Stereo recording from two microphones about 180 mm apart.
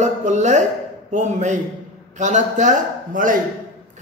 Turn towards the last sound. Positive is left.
turn(degrees=-45)  # may be behind; listen again after turning